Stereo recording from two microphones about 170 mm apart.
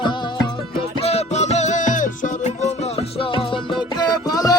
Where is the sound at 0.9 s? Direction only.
35° left (ahead or behind).